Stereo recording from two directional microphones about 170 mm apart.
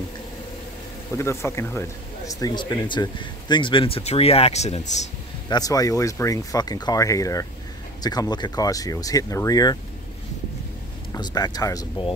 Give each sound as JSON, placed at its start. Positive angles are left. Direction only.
{"t": 1.1, "sound": "speech", "side_deg": 15}
{"t": 5.5, "sound": "speech", "side_deg": 20}
{"t": 11.1, "sound": "speech", "side_deg": 25}